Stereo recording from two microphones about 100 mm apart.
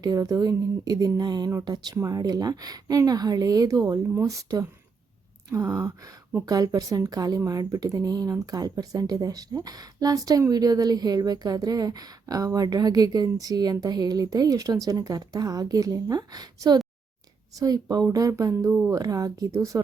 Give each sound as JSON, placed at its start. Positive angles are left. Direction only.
{"t": 0.0, "sound": "speech", "side_deg": -35}